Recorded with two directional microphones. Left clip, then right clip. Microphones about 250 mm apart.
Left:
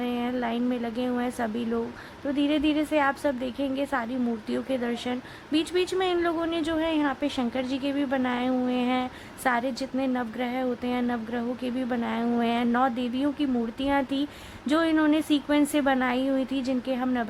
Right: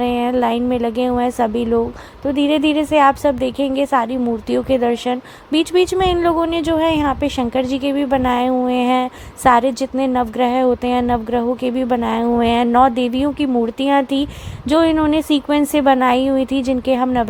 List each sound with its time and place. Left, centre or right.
0.0 s a woman's voice: right